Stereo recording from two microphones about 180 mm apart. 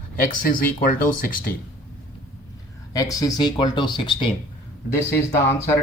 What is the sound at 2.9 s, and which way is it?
Speech, 20° left (ahead or behind).